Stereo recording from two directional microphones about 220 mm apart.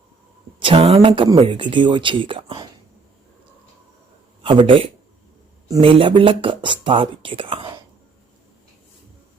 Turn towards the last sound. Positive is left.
turn(degrees=-25)  # may be behind; listen again after turning